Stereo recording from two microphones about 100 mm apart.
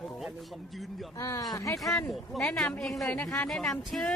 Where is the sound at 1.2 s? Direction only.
35° left (ahead or behind).